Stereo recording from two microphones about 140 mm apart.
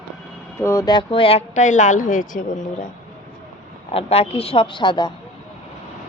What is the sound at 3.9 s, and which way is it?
Speech, 45° left (ahead or behind).